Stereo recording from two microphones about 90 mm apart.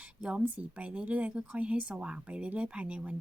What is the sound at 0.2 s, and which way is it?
A woman's voice, 10° right (ahead or behind).